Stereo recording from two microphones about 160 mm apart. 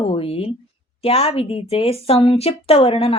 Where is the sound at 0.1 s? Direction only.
35° left (ahead or behind).